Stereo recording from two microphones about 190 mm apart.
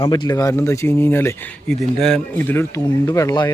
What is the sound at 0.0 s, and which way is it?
Speech, 20° left (ahead or behind).